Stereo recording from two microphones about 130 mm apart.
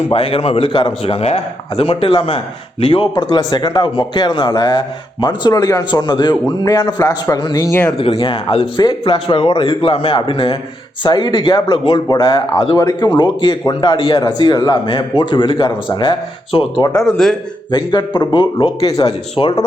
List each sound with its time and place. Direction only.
0.1 s a man's voice: 45° left (ahead or behind); by 7.8 s 25° left (ahead or behind)
7.9 s a man's voice: 50° left (ahead or behind)
12.7 s a man's voice: 25° left (ahead or behind)
17.0 s speech: 5° left (ahead or behind)
17.7 s speech: 35° left (ahead or behind)
18.9 s a man's voice: 30° left (ahead or behind)